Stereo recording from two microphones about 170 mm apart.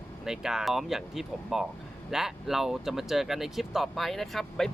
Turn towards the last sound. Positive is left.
turn(degrees=0)  # may be behind; listen again after turning